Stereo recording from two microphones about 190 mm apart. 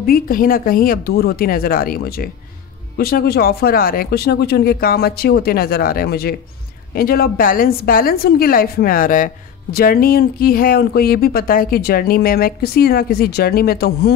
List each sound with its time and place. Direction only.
0.0 s a woman's voice: 50° left (ahead or behind)